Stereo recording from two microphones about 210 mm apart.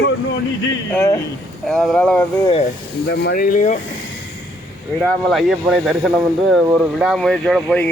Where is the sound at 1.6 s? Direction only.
Centre (ahead or behind).